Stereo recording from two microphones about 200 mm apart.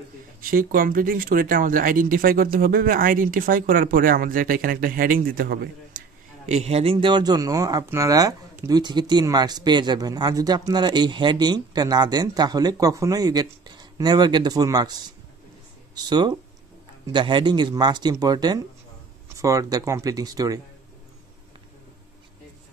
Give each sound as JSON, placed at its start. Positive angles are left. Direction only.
{"t": 0.4, "sound": "speech", "side_deg": -45}
{"t": 6.4, "sound": "speech", "side_deg": -35}